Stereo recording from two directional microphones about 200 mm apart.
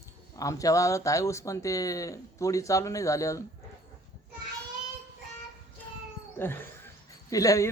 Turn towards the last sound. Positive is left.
turn(degrees=15)  # may be behind; listen again after turning